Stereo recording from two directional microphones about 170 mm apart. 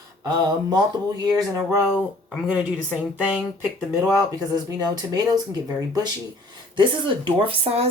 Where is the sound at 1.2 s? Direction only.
20° right (ahead or behind).